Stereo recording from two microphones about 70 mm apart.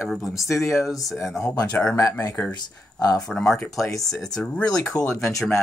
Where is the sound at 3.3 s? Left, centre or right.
Centre.